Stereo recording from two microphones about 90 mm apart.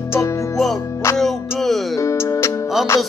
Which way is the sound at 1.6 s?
Centre (ahead or behind).